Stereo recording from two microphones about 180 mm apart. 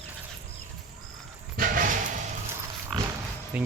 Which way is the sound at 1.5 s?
50° right (ahead or behind).